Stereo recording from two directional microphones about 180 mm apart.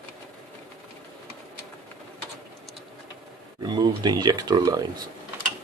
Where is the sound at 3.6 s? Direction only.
25° right (ahead or behind).